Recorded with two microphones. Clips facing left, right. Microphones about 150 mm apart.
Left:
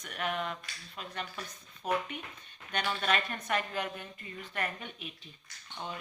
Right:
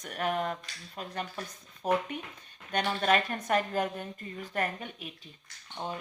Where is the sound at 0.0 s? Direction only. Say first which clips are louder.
Right 4 dB; 40° right (ahead or behind).